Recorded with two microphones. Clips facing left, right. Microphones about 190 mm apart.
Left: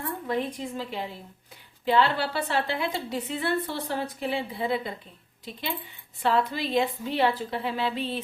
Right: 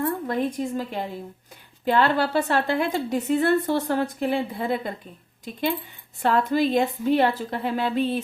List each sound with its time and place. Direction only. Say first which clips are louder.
0.3 s a woman's voice: right 4 dB; 45° right (ahead or behind)
6.2 s a woman's voice: right 5 dB; 50° right (ahead or behind)